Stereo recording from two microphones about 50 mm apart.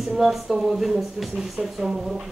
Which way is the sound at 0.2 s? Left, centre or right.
Centre.